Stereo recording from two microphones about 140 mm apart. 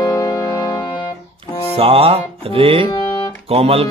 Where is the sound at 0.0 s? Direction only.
30° left (ahead or behind).